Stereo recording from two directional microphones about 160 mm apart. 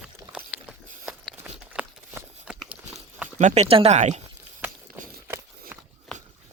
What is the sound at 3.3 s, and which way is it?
Speech, 45° right (ahead or behind).